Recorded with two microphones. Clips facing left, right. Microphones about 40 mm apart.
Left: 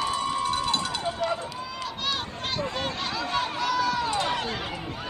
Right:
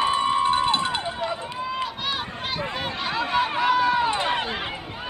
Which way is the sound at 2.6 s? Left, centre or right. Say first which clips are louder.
Right 1 dB; centre.